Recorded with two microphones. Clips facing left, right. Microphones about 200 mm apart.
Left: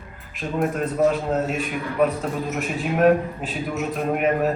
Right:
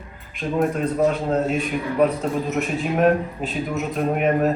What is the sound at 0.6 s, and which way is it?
A man's voice, centre (ahead or behind).